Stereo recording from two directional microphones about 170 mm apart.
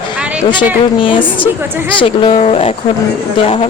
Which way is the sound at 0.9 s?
30° left (ahead or behind).